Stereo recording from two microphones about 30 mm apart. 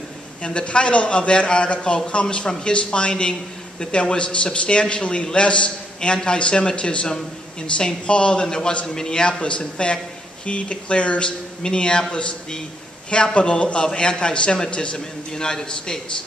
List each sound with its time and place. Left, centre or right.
0.4 s a man's voice: left
5.9 s a man's voice: left
9.4 s a man's voice: left
15.3 s speech: left